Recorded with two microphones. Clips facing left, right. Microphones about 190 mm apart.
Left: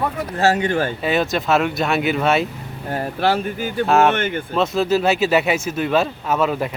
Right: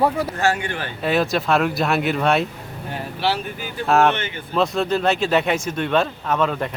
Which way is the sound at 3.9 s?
Centre (ahead or behind).